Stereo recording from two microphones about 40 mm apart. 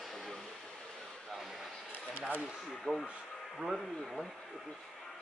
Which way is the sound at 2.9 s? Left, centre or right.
Centre.